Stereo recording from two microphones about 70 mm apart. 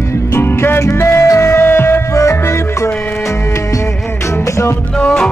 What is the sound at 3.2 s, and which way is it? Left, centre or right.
Music, left.